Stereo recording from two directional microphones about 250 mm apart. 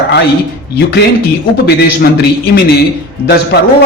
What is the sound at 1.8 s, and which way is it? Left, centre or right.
A man's voice, left.